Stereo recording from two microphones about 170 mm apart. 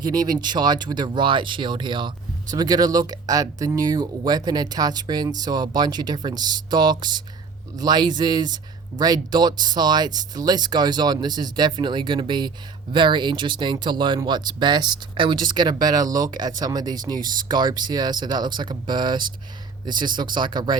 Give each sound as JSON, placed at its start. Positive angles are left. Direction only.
{"t": 0.0, "sound": "speech", "side_deg": -25}